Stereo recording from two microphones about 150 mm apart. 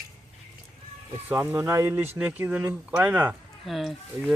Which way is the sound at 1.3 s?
15° right (ahead or behind).